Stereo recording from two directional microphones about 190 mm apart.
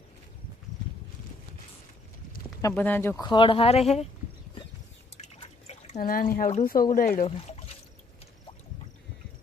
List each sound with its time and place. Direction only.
2.6 s speech: 15° left (ahead or behind)
3.2 s speech: 25° left (ahead or behind)
5.1 s drip: 35° left (ahead or behind)
6.0 s speech: 50° left (ahead or behind)
7.3 s speech: 30° left (ahead or behind)